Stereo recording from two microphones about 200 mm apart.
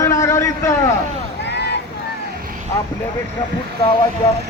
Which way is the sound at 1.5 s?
55° left (ahead or behind).